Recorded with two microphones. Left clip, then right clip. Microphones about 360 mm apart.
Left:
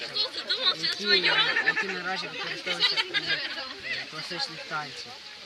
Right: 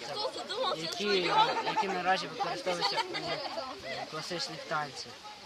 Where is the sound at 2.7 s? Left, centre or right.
Centre.